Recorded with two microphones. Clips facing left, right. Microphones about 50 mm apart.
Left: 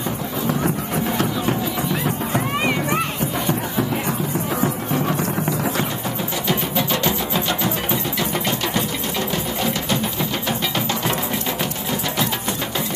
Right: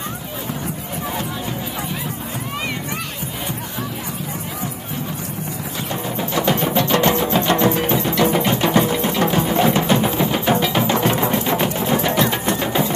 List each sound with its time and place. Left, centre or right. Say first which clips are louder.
7.9 s music: right 6 dB; centre
8.5 s sewing machine: right 6 dB; right
9.3 s music: right 6 dB; right
11.1 s music: right 5 dB; centre